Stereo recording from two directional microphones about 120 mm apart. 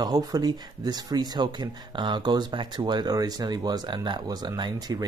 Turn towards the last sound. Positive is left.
turn(degrees=-35)  # may be behind; listen again after turning